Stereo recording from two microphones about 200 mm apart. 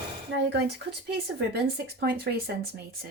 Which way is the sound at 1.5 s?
50° right (ahead or behind).